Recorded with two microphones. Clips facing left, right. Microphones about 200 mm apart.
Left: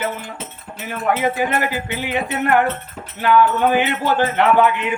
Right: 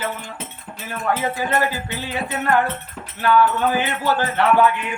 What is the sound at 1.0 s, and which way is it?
Speech, 15° left (ahead or behind).